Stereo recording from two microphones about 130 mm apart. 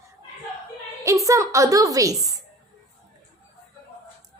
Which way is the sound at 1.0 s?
25° right (ahead or behind).